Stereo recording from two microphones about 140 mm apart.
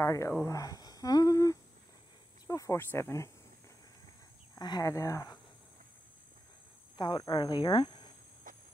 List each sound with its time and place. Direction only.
0.0 s speech: 20° left (ahead or behind)
4.6 s speech: 30° left (ahead or behind)
7.0 s speech: 30° left (ahead or behind)
8.5 s a sound: 75° right (ahead or behind)